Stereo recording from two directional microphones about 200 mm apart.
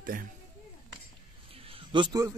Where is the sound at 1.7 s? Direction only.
25° right (ahead or behind).